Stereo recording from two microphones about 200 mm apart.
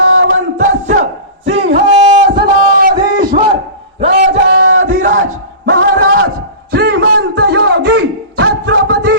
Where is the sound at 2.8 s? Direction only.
45° right (ahead or behind).